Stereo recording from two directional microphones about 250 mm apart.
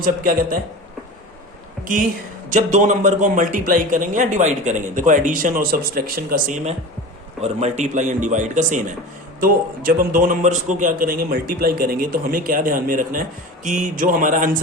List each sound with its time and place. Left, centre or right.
0.0 s a man's voice: right
1.8 s a woman's voice: right